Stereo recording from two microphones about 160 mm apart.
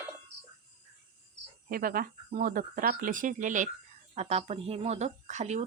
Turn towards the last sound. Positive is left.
turn(degrees=-45)  # may be behind; listen again after turning